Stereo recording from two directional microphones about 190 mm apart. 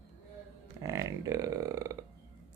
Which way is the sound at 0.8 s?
15° right (ahead or behind).